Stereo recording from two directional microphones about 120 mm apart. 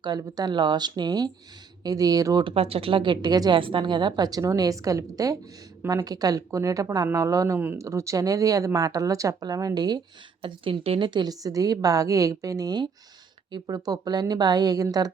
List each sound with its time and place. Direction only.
0.2 s a woman's voice: 30° right (ahead or behind)
2.4 s a woman's voice: 50° right (ahead or behind); by 10.0 s 35° right (ahead or behind)
10.4 s a woman's voice: 50° right (ahead or behind); by 15.1 s 30° right (ahead or behind)